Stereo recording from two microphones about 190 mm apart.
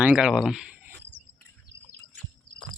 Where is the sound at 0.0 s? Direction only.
5° right (ahead or behind).